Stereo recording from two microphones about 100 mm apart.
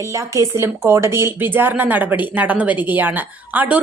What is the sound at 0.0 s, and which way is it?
A woman's voice, 30° right (ahead or behind).